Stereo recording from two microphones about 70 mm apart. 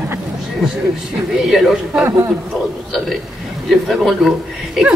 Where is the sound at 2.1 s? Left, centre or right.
Right.